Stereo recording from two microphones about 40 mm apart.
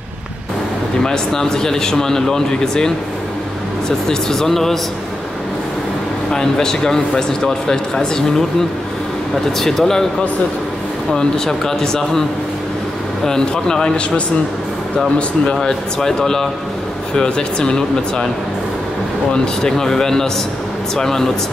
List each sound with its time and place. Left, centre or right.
1.0 s a man's voice: centre
4.1 s a man's voice: centre
6.3 s a man's voice: centre
11.1 s a man's voice: centre
13.2 s a man's voice: centre
15.6 s a man's voice: centre
19.3 s a man's voice: centre